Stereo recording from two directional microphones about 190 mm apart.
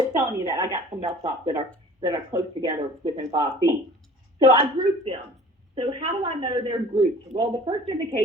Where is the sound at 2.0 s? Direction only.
20° right (ahead or behind).